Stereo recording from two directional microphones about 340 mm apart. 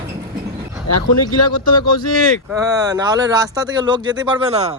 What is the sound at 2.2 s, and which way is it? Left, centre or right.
Speech, centre.